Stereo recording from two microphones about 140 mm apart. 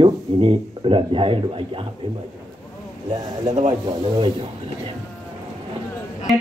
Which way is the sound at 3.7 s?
35° right (ahead or behind).